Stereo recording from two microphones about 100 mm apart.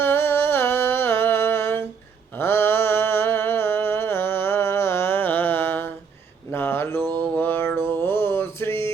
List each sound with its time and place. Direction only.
0.0 s humming: 25° left (ahead or behind)
2.4 s a sound: 25° left (ahead or behind)
7.0 s mantra: 45° right (ahead or behind)
7.3 s music: 20° left (ahead or behind)
7.8 s mantra: 25° left (ahead or behind)